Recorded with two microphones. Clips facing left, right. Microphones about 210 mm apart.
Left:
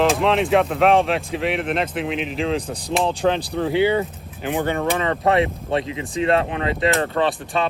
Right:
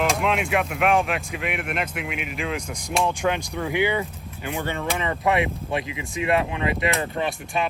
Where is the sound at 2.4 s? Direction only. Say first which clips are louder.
Left 5 dB; 30° left (ahead or behind).